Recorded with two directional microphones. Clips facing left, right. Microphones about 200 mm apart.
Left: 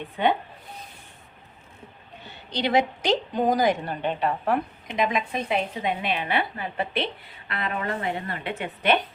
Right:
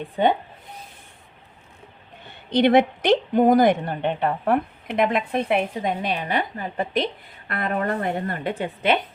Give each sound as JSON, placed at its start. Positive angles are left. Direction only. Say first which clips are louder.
{"t": 2.2, "sound": "a woman's voice", "louder": "right 9 dB", "side_deg": -55}
{"t": 5.9, "sound": "a woman's voice", "louder": "right 2 dB", "side_deg": -40}